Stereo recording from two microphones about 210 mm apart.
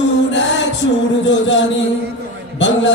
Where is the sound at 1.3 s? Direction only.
60° left (ahead or behind).